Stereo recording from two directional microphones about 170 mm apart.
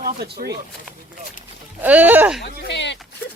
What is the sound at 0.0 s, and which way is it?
Speech, 70° right (ahead or behind).